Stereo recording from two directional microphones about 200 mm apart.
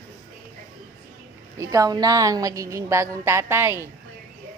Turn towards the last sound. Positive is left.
turn(degrees=-10)  # may be behind; listen again after turning